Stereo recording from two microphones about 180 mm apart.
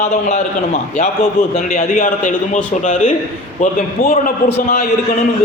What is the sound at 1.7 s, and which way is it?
A man's voice, 50° left (ahead or behind).